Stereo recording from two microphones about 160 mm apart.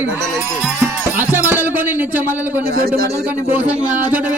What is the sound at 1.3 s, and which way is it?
Speech, 10° right (ahead or behind).